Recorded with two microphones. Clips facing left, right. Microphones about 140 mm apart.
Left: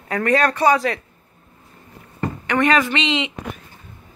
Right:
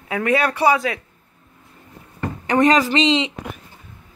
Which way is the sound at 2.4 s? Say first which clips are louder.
Right 3 dB; 35° right (ahead or behind).